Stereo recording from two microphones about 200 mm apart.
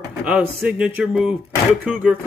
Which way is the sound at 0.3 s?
5° right (ahead or behind).